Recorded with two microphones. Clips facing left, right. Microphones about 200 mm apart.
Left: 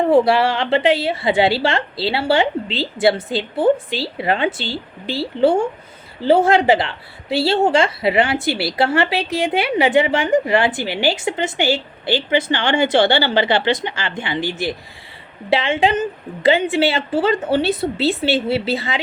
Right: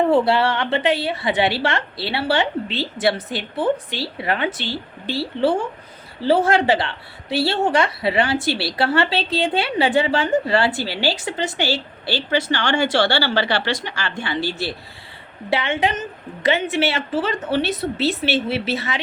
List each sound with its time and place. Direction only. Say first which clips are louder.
0.1 s a woman's voice: left 3 dB; 25° left (ahead or behind)